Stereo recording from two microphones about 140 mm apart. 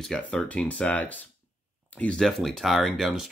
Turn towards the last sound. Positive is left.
turn(degrees=0)  # may be behind; listen again after turning